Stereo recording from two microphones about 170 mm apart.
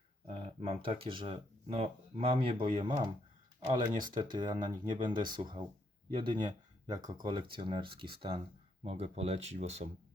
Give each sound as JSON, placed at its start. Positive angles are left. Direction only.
{"t": 0.3, "sound": "speech", "side_deg": -30}